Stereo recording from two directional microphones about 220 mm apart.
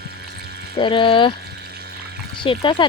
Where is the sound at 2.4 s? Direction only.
20° left (ahead or behind).